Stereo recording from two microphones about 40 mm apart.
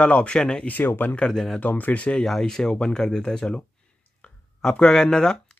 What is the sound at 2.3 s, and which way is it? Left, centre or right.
Speech, centre.